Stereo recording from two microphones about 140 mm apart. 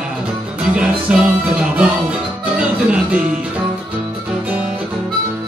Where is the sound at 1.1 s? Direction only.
10° right (ahead or behind).